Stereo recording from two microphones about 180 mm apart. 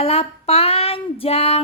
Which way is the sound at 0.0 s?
35° left (ahead or behind).